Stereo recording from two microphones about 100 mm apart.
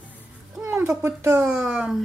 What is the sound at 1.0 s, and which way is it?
Speech, 25° right (ahead or behind).